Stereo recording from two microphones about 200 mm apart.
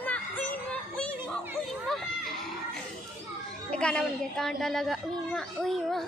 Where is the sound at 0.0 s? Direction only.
10° left (ahead or behind).